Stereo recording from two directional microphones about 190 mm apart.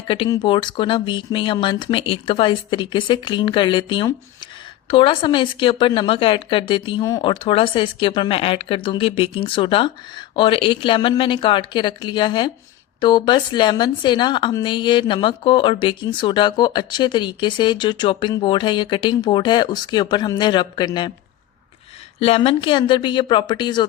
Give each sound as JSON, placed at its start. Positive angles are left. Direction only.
{"t": 0.1, "sound": "a woman's voice", "side_deg": 25}
{"t": 22.2, "sound": "a woman's voice", "side_deg": 30}